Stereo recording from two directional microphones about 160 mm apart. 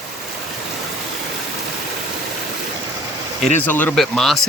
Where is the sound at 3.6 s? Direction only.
10° left (ahead or behind).